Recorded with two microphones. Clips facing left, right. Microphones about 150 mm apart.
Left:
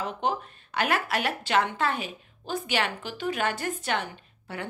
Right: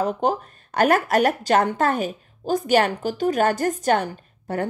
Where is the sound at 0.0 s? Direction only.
40° right (ahead or behind).